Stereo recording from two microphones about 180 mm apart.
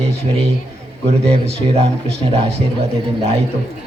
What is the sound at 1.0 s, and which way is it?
Speech, 35° right (ahead or behind).